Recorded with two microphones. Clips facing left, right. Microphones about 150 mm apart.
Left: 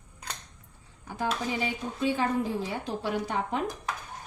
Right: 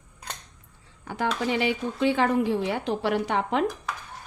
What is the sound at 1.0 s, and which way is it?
A woman's voice, 75° right (ahead or behind).